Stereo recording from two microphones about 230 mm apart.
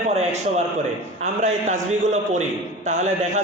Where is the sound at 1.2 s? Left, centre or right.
Right.